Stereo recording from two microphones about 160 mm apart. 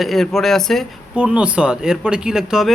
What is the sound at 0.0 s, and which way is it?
Speech, centre (ahead or behind).